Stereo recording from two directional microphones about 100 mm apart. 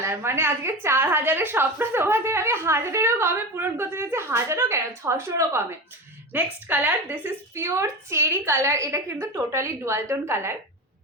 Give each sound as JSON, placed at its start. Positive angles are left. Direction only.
{"t": 0.0, "sound": "a woman's voice", "side_deg": -25}
{"t": 6.3, "sound": "a woman's voice", "side_deg": -15}